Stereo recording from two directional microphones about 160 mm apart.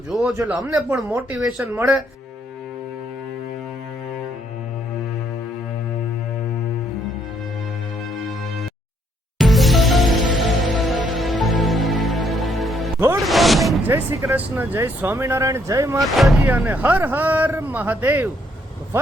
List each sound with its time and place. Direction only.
0.1 s speech: 5° right (ahead or behind); by 2.0 s 20° right (ahead or behind)
9.4 s music: centre (ahead or behind)
13.2 s a sound: centre (ahead or behind)
13.8 s speech: 15° right (ahead or behind)
16.1 s speech: centre (ahead or behind)
16.4 s speech: 10° right (ahead or behind)